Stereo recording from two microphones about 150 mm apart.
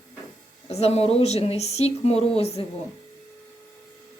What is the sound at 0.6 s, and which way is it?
Speech, 45° left (ahead or behind).